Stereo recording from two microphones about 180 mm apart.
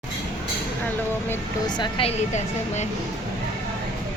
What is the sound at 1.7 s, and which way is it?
Speech, 25° left (ahead or behind).